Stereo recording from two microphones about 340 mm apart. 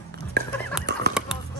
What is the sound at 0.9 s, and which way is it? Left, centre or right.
Fowl, right.